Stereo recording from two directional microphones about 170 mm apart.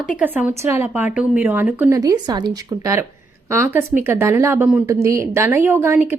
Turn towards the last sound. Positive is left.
turn(degrees=-10)  # may be behind; listen again after turning